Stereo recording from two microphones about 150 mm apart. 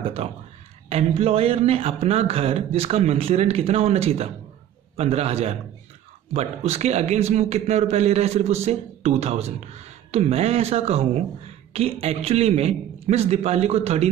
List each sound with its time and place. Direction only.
0.2 s a man's voice: 40° right (ahead or behind)